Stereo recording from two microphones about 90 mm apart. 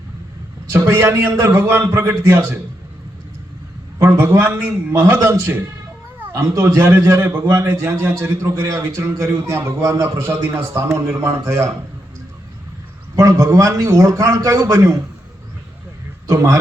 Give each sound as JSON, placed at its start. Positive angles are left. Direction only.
{"t": 0.7, "sound": "a man's voice", "side_deg": -30}
{"t": 4.2, "sound": "a man's voice", "side_deg": -30}
{"t": 6.1, "sound": "cat", "side_deg": -25}
{"t": 6.5, "sound": "a man's voice", "side_deg": -35}
{"t": 13.1, "sound": "a man's voice", "side_deg": -40}
{"t": 16.2, "sound": "speech", "side_deg": -35}